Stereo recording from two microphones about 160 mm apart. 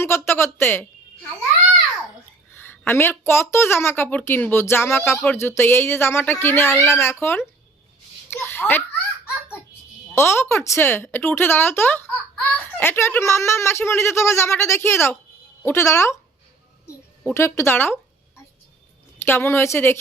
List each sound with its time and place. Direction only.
0.0 s a sound: 15° left (ahead or behind)
2.6 s speech: 15° left (ahead or behind)
5.0 s speech: centre (ahead or behind)
5.3 s speech: 15° left (ahead or behind)
10.2 s speech: 15° left (ahead or behind)
17.2 s speech: 15° left (ahead or behind)
19.2 s speech: 15° left (ahead or behind)